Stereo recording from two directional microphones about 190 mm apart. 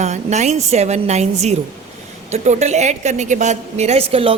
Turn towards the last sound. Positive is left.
turn(degrees=-30)  # may be behind; listen again after turning